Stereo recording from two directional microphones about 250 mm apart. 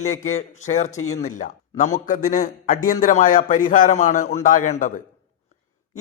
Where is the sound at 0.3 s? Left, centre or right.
Left.